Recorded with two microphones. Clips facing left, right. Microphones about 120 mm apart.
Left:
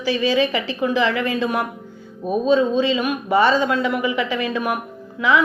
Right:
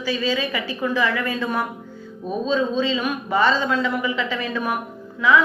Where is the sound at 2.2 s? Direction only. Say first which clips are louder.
Left 5 dB; 10° left (ahead or behind).